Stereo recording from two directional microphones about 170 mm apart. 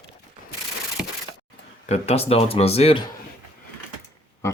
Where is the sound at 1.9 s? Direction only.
35° left (ahead or behind).